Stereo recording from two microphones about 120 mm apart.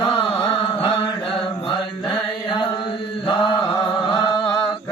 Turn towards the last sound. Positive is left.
turn(degrees=40)  # may be behind; listen again after turning